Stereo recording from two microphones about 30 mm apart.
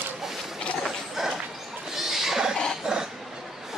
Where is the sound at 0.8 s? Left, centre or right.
Centre.